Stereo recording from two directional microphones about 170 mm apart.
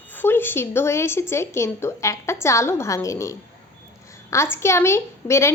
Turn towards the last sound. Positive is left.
turn(degrees=15)  # may be behind; listen again after turning